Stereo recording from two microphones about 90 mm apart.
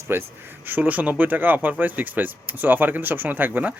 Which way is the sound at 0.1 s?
25° right (ahead or behind).